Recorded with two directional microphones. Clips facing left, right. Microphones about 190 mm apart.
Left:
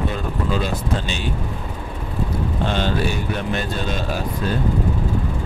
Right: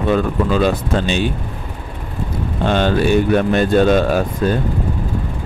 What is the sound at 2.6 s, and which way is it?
Speech, 60° right (ahead or behind).